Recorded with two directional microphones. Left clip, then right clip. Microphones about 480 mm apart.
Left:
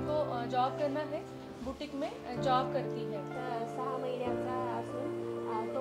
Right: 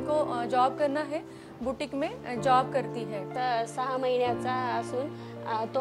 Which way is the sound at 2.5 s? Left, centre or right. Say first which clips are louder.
Right 7 dB; right.